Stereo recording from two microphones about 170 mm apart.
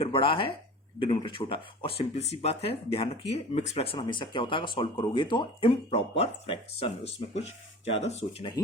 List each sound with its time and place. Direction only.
0.0 s speech: 30° left (ahead or behind)